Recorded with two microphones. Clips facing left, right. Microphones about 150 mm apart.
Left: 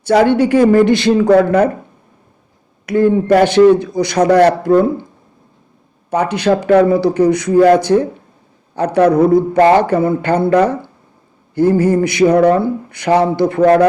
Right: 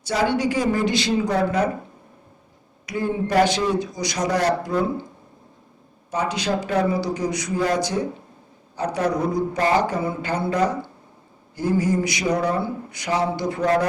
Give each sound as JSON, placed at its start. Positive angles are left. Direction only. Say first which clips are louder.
{"t": 0.0, "sound": "speech", "louder": "left 10 dB", "side_deg": 65}
{"t": 2.8, "sound": "speech", "louder": "left 12 dB", "side_deg": 60}
{"t": 6.1, "sound": "speech", "louder": "left 10 dB", "side_deg": 60}